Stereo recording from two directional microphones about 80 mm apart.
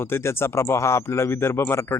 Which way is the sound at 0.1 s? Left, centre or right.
Left.